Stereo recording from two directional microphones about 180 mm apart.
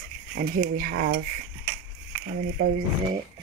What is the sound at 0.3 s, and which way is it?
Speech, 60° right (ahead or behind).